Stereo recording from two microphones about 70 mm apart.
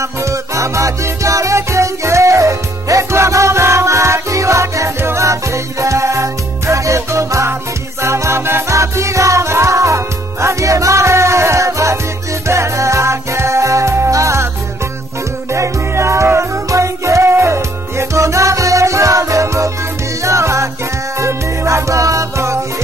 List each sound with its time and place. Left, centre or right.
0.0 s music: right
15.5 s music: right